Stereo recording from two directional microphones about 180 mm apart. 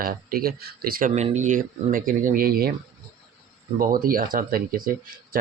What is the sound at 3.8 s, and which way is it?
Speech, 50° right (ahead or behind).